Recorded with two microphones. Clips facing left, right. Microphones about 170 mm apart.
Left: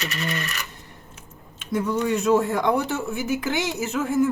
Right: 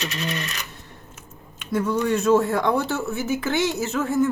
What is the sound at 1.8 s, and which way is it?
Speech, 15° left (ahead or behind).